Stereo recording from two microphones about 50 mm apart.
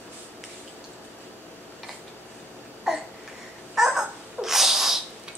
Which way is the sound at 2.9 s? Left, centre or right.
Centre.